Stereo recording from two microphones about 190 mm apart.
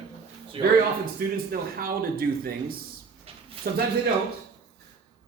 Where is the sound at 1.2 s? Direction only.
50° right (ahead or behind).